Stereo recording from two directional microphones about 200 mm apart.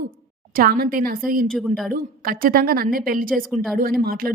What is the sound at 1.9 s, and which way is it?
A woman's voice, 45° right (ahead or behind).